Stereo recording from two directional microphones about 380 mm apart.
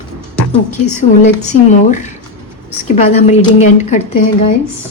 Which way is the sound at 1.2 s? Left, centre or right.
Centre.